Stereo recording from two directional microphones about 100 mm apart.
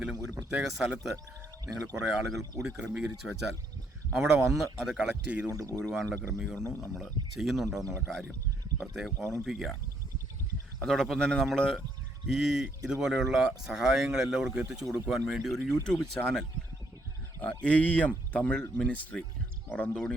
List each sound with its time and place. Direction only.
0.0 s speech: 10° right (ahead or behind)
5.5 s speech: 35° right (ahead or behind)
5.8 s speech: centre (ahead or behind)
10.8 s speech: 5° left (ahead or behind)
17.6 s speech: 10° left (ahead or behind)